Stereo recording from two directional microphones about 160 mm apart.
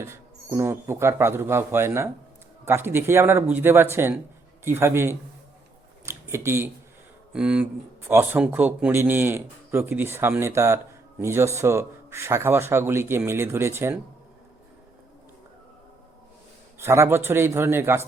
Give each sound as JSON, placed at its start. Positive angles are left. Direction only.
{"t": 0.0, "sound": "speech", "side_deg": -15}
{"t": 6.1, "sound": "a sound", "side_deg": -15}
{"t": 7.3, "sound": "speech", "side_deg": -5}
{"t": 16.7, "sound": "speech", "side_deg": -15}